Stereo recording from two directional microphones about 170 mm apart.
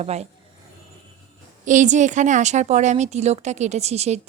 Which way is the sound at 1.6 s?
45° right (ahead or behind).